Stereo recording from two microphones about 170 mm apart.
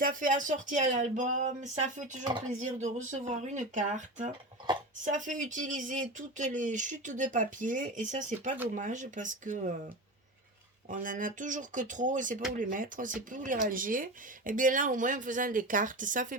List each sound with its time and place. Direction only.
0.0 s speech: 50° right (ahead or behind)
10.8 s speech: 50° right (ahead or behind)